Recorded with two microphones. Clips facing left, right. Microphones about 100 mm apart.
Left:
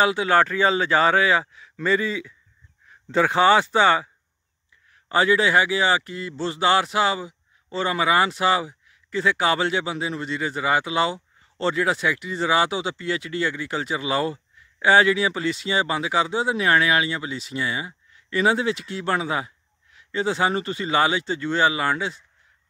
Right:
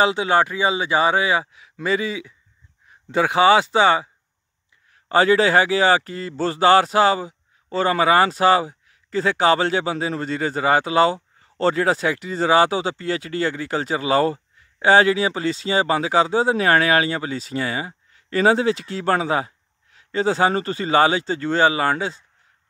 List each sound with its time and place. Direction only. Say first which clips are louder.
0.0 s a man's voice: right 1 dB; 25° right (ahead or behind)
5.0 s speech: right 3 dB; 35° right (ahead or behind)